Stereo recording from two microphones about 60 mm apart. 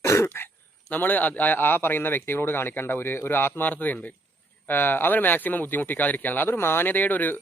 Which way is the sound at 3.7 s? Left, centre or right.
Left.